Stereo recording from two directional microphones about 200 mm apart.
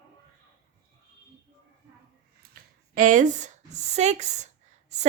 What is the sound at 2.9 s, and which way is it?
A woman's voice, 40° right (ahead or behind).